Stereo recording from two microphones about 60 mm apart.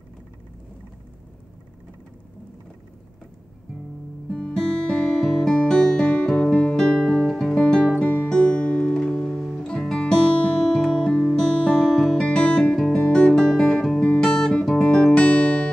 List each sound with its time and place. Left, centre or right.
4.3 s music: centre
8.0 s music: left
8.3 s music: centre
9.3 s music: centre
13.7 s music: centre
14.0 s music: centre